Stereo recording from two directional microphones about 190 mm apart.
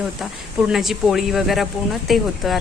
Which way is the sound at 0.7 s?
Centre (ahead or behind).